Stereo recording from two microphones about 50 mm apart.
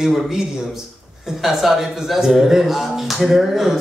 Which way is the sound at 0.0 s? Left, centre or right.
Centre.